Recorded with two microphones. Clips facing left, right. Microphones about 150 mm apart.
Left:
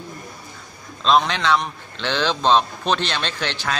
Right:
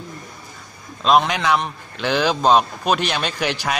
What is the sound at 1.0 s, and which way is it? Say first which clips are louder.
A man's voice: right 1 dB; 10° right (ahead or behind).